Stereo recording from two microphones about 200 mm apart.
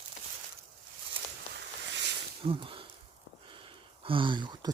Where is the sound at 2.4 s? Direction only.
25° right (ahead or behind).